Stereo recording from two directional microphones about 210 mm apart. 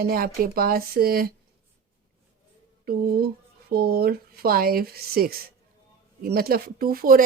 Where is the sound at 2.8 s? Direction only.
45° right (ahead or behind).